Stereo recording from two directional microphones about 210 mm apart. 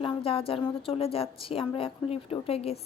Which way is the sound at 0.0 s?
25° left (ahead or behind).